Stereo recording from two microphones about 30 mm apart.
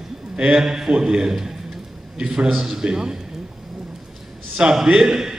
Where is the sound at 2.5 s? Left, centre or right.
Centre.